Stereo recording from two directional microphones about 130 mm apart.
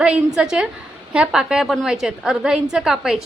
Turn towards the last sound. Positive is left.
turn(degrees=-5)  # may be behind; listen again after turning